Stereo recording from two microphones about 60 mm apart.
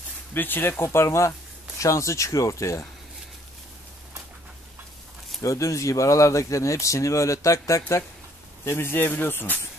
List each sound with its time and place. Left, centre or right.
0.3 s speech: left
5.4 s speech: left
8.6 s speech: left